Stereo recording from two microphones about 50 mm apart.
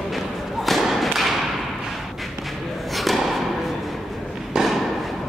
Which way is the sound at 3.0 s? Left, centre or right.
Centre.